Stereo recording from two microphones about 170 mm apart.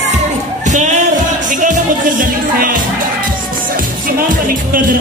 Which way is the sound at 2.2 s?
55° right (ahead or behind).